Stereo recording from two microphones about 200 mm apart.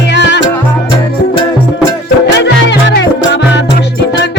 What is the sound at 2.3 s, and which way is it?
Music, 60° left (ahead or behind).